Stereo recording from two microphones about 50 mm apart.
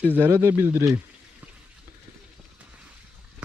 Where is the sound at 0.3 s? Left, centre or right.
Right.